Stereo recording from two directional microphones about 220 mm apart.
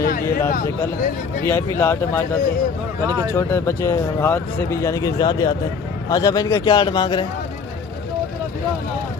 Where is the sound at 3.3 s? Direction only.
10° left (ahead or behind).